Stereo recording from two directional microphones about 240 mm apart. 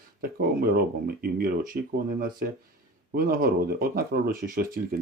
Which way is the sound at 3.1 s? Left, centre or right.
Right.